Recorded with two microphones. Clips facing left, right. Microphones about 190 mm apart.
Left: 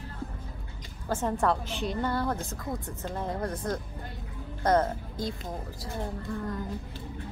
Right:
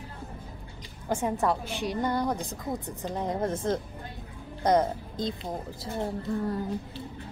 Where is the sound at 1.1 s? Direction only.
10° right (ahead or behind).